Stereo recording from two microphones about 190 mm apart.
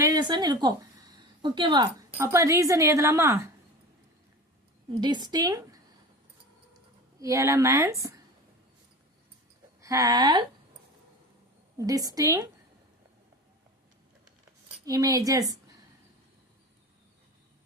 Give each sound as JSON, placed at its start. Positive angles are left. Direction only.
{"t": 0.0, "sound": "a sound", "side_deg": -20}
{"t": 2.0, "sound": "speech", "side_deg": -15}
{"t": 4.9, "sound": "a woman's voice", "side_deg": -25}
{"t": 7.2, "sound": "speech", "side_deg": -15}
{"t": 9.8, "sound": "a woman's voice", "side_deg": -15}
{"t": 11.8, "sound": "a woman's voice", "side_deg": -20}
{"t": 14.8, "sound": "a woman's voice", "side_deg": -20}